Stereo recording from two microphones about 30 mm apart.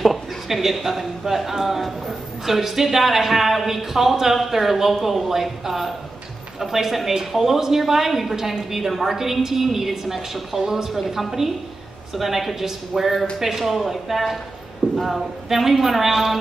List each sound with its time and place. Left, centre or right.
0.0 s a sound: centre
0.6 s a man's voice: centre
10.9 s a man's voice: centre